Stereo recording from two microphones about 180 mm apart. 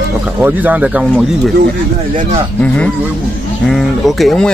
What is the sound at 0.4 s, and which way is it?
Speech, 10° right (ahead or behind).